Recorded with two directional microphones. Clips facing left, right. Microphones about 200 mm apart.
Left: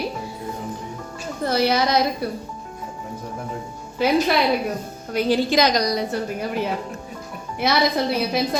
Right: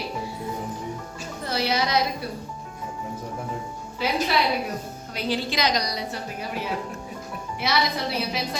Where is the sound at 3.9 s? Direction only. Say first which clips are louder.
Left 6 dB; 50° left (ahead or behind).